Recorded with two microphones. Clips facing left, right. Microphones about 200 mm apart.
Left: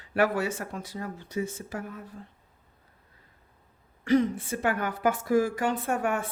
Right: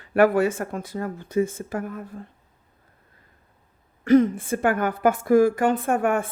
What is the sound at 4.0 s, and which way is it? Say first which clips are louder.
Speech: right 6 dB; 50° right (ahead or behind).